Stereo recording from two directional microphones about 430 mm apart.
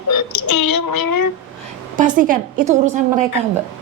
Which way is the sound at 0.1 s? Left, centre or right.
Left.